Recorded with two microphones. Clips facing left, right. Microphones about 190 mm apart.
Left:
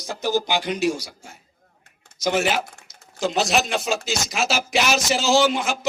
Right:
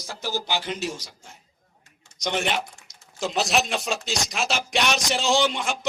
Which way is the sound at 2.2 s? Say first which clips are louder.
Left 5 dB; 5° left (ahead or behind).